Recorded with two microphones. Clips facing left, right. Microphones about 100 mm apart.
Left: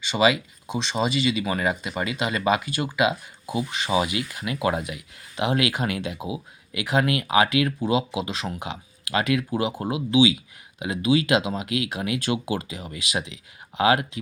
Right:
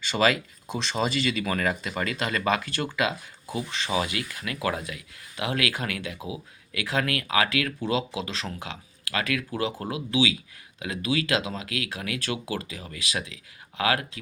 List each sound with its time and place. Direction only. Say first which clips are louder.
0.1 s speech: left 3 dB; 5° left (ahead or behind)